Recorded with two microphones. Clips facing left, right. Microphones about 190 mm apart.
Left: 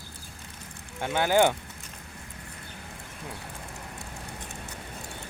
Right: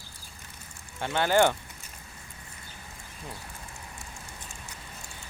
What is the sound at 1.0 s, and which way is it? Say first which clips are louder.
Speech: left 1 dB; 10° left (ahead or behind).